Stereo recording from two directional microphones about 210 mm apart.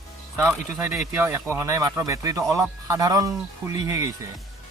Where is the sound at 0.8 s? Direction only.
10° right (ahead or behind).